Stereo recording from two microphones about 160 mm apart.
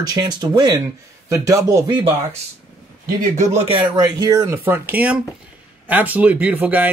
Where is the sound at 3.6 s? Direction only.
35° right (ahead or behind).